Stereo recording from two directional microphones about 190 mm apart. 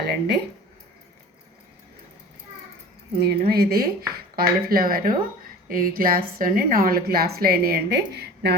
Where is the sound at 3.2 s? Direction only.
55° right (ahead or behind).